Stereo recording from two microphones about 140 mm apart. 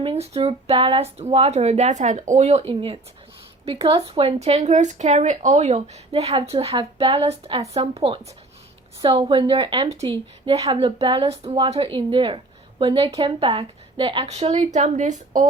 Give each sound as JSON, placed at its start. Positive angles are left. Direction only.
{"t": 0.0, "sound": "speech", "side_deg": -45}
{"t": 9.9, "sound": "speech", "side_deg": -45}
{"t": 14.3, "sound": "speech", "side_deg": -50}